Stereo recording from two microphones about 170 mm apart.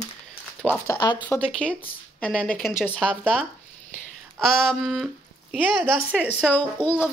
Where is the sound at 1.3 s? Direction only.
5° left (ahead or behind).